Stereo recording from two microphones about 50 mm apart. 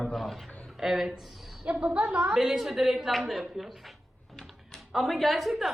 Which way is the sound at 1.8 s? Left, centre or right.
Right.